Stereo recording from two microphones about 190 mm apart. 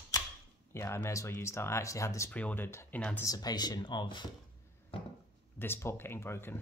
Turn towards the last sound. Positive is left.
turn(degrees=10)  # may be behind; listen again after turning